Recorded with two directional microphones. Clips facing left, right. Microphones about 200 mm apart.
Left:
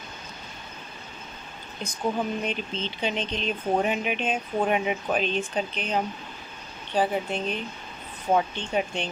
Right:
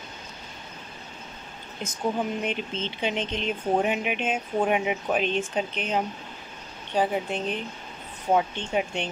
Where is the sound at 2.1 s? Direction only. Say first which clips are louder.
Even; 15° right (ahead or behind).